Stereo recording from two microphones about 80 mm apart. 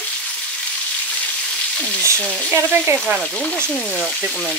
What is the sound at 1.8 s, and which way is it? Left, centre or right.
Frying, centre.